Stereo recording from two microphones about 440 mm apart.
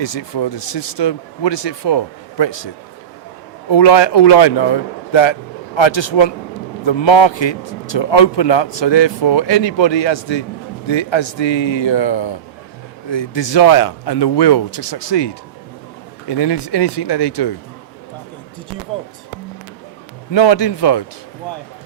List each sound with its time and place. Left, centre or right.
0.0 s a man's voice: left
3.7 s a man's voice: left
16.3 s speech: left
20.3 s a man's voice: left